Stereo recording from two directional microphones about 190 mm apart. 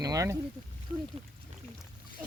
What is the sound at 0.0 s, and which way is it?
Speech, 20° right (ahead or behind).